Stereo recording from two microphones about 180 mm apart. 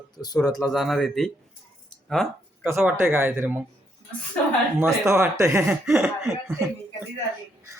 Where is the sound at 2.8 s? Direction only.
10° right (ahead or behind).